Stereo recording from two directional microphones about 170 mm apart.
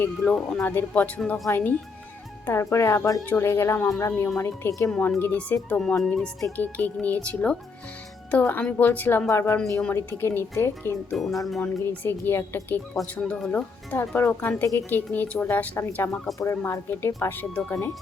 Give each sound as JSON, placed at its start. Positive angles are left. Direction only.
{"t": 0.0, "sound": "speech", "side_deg": 5}
{"t": 11.2, "sound": "speech", "side_deg": 0}
{"t": 11.6, "sound": "speech", "side_deg": 15}